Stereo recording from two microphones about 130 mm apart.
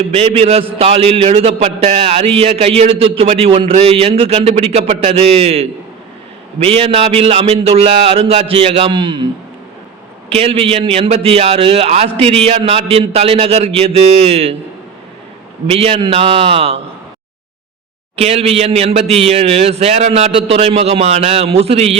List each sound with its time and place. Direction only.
0.1 s a man's voice: 50° right (ahead or behind)
10.2 s a man's voice: 50° right (ahead or behind)
15.6 s a man's voice: 50° right (ahead or behind)
18.2 s a man's voice: 50° right (ahead or behind)